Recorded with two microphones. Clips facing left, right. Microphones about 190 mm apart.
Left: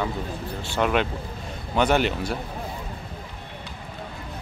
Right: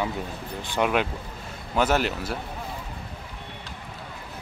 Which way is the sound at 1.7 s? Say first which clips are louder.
Left 2 dB; 5° right (ahead or behind).